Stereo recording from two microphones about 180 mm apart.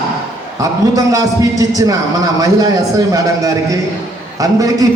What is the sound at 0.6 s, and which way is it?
A man's voice, 20° right (ahead or behind).